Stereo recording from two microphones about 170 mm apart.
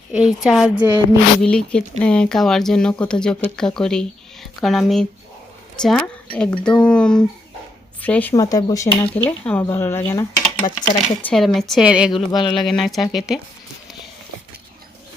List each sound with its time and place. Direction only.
0.1 s speech: 5° right (ahead or behind); by 9.0 s 20° left (ahead or behind)
9.1 s speech: 10° left (ahead or behind)
12.1 s speech: 30° left (ahead or behind)
12.5 s speech: centre (ahead or behind)